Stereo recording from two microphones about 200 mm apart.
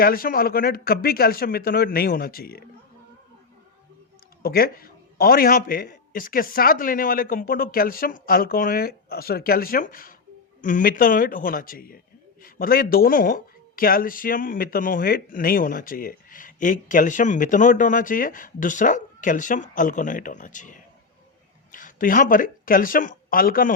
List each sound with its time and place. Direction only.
0.0 s speech: 45° left (ahead or behind)
4.4 s speech: 50° left (ahead or behind)